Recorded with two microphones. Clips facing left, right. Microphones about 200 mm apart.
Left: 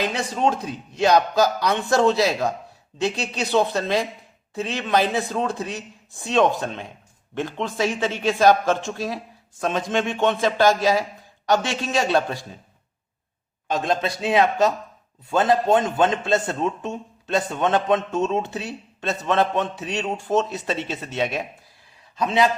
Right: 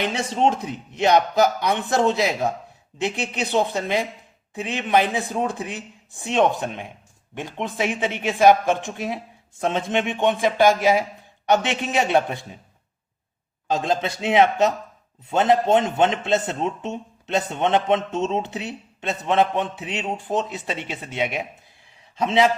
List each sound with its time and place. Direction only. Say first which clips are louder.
0.0 s a man's voice: right 1 dB; 25° right (ahead or behind)
13.7 s a man's voice: even; 25° right (ahead or behind)